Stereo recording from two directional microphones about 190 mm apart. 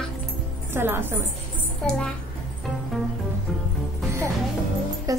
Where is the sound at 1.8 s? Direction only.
5° left (ahead or behind).